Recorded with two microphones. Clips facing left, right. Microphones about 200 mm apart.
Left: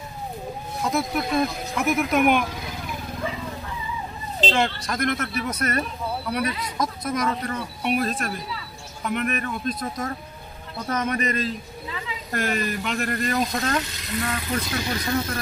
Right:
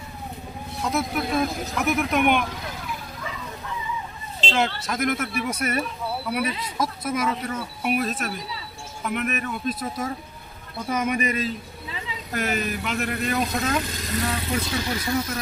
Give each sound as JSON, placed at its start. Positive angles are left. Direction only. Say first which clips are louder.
{"t": 0.8, "sound": "speech", "louder": "left 1 dB", "side_deg": 0}
{"t": 4.5, "sound": "speech", "louder": "even", "side_deg": -5}